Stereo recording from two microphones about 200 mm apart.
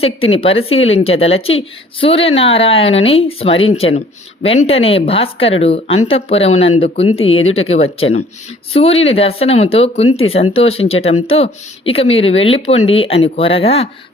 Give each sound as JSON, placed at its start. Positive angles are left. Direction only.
{"t": 0.3, "sound": "a woman's voice", "side_deg": 30}